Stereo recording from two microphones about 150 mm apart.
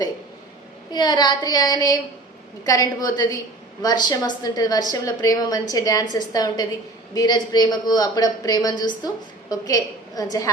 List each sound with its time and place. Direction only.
0.9 s a woman's voice: 30° left (ahead or behind)